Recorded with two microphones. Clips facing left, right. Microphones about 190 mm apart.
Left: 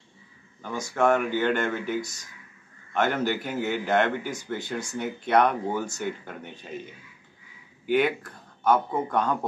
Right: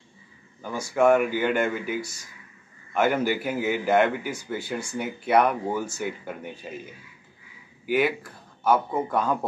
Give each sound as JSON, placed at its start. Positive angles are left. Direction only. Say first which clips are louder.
{"t": 0.6, "sound": "a man's voice", "louder": "right 3 dB", "side_deg": -10}
{"t": 7.8, "sound": "speech", "louder": "even", "side_deg": -5}